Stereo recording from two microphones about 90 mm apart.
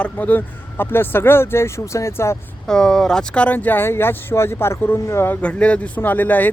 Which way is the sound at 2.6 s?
5° left (ahead or behind).